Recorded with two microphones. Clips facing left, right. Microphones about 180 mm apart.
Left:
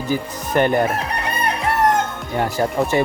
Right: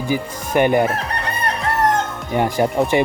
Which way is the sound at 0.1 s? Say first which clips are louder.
Even; 10° right (ahead or behind).